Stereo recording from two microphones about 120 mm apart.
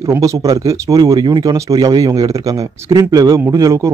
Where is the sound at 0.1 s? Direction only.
30° right (ahead or behind).